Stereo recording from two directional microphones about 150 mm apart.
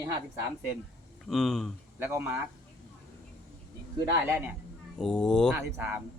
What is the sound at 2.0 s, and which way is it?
Speech, 15° right (ahead or behind).